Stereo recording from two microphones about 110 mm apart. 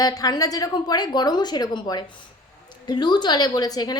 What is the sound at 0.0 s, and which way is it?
A woman's voice, 35° left (ahead or behind).